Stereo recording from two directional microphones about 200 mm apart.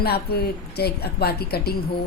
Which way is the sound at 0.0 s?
50° left (ahead or behind).